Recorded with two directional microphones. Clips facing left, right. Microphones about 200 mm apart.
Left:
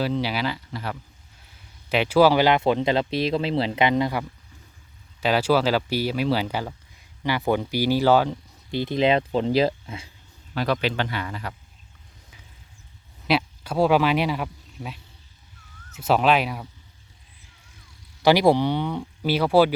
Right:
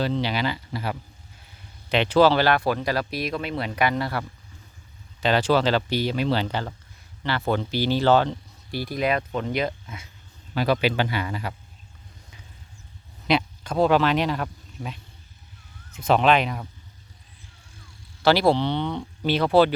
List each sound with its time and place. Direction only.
0.0 s speech: 5° left (ahead or behind)
1.9 s speech: 5° left (ahead or behind)
8.7 s speech: 20° left (ahead or behind)
10.5 s speech: centre (ahead or behind)
13.2 s speech: 5° left (ahead or behind)
18.2 s speech: 15° left (ahead or behind)